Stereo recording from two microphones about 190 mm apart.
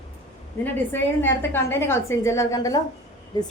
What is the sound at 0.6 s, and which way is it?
A woman's voice, 10° left (ahead or behind).